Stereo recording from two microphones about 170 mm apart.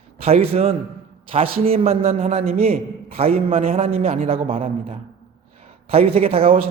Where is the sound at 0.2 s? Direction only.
35° right (ahead or behind).